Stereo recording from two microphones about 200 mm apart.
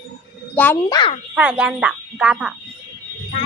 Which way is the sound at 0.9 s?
25° left (ahead or behind).